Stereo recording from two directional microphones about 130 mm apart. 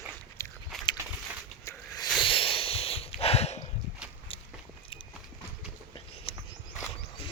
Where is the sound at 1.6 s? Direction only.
30° left (ahead or behind).